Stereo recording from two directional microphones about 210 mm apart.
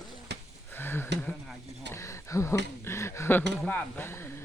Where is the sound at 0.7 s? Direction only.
10° left (ahead or behind).